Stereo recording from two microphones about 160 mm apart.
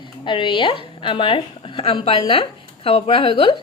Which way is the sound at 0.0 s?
30° left (ahead or behind).